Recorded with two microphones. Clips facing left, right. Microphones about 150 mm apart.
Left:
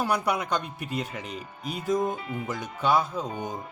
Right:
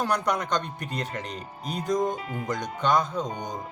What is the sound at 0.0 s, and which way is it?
Speech, 5° left (ahead or behind).